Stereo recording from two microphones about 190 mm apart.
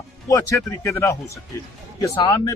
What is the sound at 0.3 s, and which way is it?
Speech, 15° left (ahead or behind).